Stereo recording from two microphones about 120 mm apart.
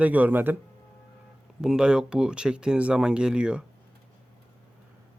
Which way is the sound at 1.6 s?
5° right (ahead or behind).